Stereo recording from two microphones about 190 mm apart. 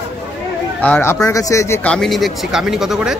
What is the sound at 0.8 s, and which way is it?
Speech, 10° left (ahead or behind).